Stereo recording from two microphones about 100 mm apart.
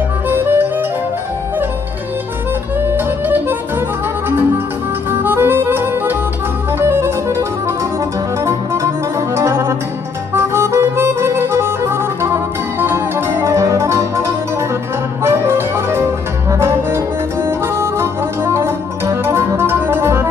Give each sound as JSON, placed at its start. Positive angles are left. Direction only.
{"t": 0.3, "sound": "music", "side_deg": -20}
{"t": 2.8, "sound": "music", "side_deg": -20}
{"t": 5.1, "sound": "harmonica", "side_deg": -20}
{"t": 6.8, "sound": "music", "side_deg": -25}
{"t": 10.3, "sound": "harmonica", "side_deg": -25}
{"t": 15.2, "sound": "music", "side_deg": -25}